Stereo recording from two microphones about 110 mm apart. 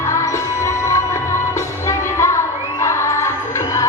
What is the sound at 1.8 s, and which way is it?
Music, 25° left (ahead or behind).